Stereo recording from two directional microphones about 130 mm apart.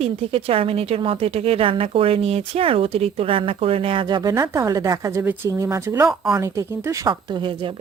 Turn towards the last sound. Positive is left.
turn(degrees=-40)  # may be behind; listen again after turning